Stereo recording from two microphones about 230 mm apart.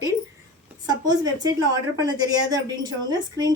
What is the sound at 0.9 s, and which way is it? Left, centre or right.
A woman's voice, centre.